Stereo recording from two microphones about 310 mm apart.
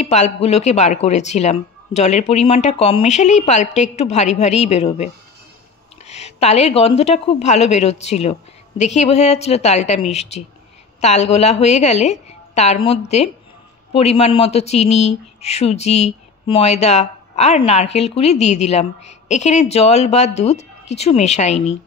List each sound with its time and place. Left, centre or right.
0.0 s speech: left